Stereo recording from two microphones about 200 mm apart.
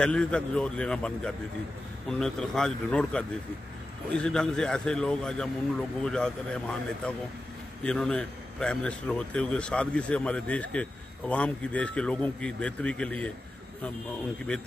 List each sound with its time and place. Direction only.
0.0 s a man's voice: 5° left (ahead or behind)